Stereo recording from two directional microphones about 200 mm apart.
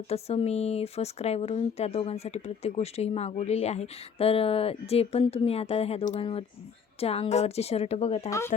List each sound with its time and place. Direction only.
0.1 s speech: 30° left (ahead or behind)